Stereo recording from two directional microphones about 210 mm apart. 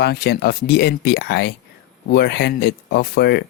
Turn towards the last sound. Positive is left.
turn(degrees=50)  # may be behind; listen again after turning